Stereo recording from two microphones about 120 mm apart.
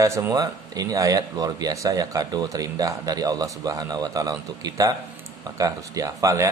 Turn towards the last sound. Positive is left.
turn(degrees=-25)  # may be behind; listen again after turning